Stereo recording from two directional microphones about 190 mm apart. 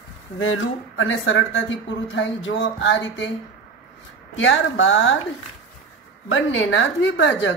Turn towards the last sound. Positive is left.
turn(degrees=75)  # may be behind; listen again after turning